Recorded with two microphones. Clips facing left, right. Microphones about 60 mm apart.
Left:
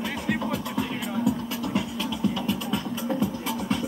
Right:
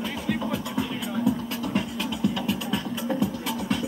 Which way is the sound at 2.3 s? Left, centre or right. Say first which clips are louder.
Even; right.